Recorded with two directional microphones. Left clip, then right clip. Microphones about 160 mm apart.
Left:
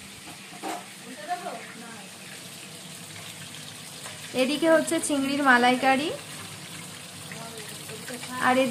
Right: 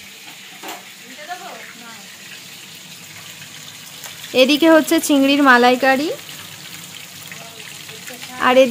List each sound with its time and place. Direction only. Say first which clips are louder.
4.4 s speech: right 10 dB; 75° right (ahead or behind); by 6.0 s 45° right (ahead or behind)
8.4 s speech: right 10 dB; 60° right (ahead or behind)